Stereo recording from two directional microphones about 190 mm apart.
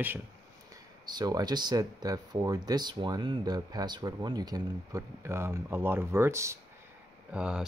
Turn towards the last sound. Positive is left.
turn(degrees=-5)  # may be behind; listen again after turning